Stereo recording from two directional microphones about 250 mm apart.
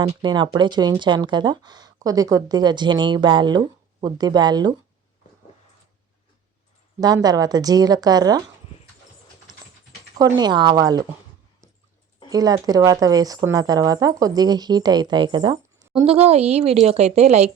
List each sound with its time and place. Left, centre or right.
0.0 s speech: centre
7.0 s speech: centre
10.3 s speech: centre
12.3 s a woman's voice: centre